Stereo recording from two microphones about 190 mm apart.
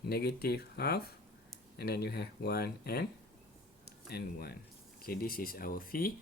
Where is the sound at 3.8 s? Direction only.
55° left (ahead or behind).